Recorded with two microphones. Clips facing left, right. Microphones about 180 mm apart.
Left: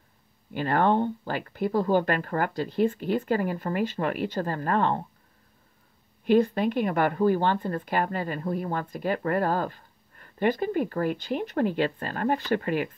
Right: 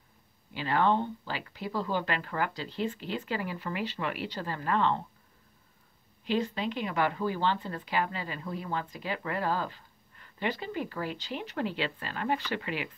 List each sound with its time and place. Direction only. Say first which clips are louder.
0.5 s speech: left 4 dB; 50° left (ahead or behind)
6.2 s speech: left 9 dB; 50° left (ahead or behind)